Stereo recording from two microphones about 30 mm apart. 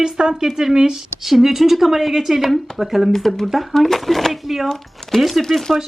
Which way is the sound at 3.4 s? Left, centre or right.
Centre.